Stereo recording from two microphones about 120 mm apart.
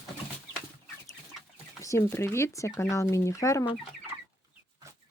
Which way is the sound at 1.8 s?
25° left (ahead or behind).